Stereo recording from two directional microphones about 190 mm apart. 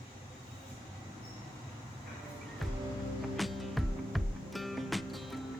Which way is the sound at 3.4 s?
Centre (ahead or behind).